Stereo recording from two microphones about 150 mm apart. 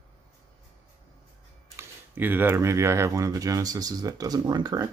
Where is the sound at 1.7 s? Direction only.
15° right (ahead or behind).